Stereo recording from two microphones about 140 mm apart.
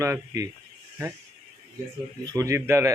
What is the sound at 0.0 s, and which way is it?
Speech, 20° right (ahead or behind).